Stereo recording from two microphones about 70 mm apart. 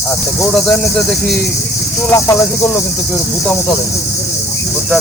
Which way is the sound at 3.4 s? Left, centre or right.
Centre.